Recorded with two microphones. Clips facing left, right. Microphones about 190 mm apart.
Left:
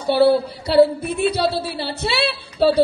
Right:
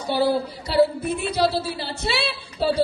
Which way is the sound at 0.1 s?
65° left (ahead or behind).